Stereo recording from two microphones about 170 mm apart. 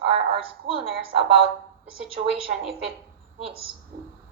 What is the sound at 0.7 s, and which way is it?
Speech, 35° right (ahead or behind).